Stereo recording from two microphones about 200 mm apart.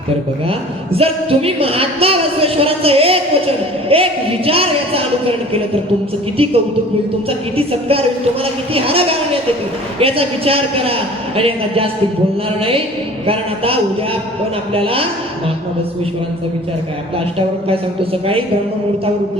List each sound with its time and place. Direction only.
0.9 s a woman's voice: 30° right (ahead or behind)
14.7 s a woman's voice: 30° right (ahead or behind)